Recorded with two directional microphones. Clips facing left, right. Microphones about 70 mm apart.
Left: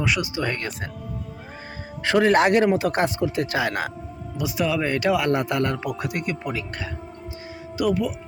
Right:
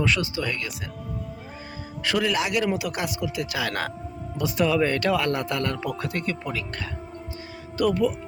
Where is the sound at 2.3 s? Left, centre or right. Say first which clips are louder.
Left 7 dB; left.